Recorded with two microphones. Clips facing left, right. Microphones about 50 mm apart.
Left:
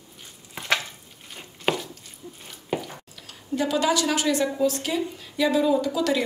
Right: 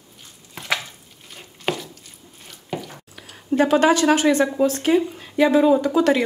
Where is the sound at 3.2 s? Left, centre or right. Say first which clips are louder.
Right 8 dB; right.